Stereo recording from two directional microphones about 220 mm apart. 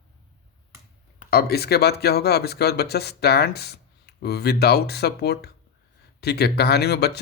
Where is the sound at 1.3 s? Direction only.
45° left (ahead or behind).